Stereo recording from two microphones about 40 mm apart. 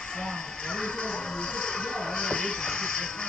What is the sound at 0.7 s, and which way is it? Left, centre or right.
Vehicle, left.